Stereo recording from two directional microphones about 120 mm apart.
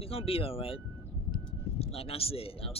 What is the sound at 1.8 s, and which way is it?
Speech, 55° left (ahead or behind).